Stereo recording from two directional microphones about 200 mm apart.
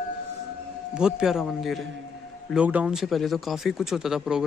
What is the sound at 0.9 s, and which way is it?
Speech, 5° right (ahead or behind).